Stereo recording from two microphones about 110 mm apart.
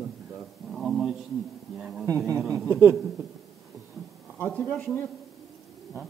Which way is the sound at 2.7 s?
20° right (ahead or behind).